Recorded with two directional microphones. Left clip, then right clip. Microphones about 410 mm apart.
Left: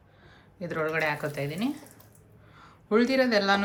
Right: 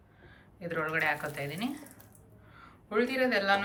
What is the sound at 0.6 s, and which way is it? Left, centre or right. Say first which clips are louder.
Speech: left 3 dB; centre.